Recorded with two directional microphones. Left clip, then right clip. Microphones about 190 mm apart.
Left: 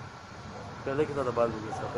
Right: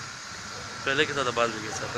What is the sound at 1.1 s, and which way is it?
Speech, 35° right (ahead or behind).